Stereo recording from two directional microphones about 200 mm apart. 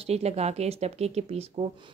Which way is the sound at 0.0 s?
30° right (ahead or behind).